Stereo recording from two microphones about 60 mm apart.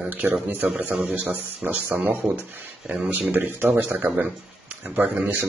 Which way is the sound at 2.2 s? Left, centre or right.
Centre.